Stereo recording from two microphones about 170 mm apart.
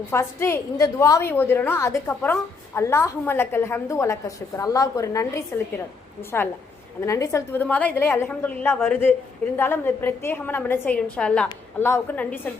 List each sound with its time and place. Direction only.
0.1 s a woman's voice: 15° left (ahead or behind)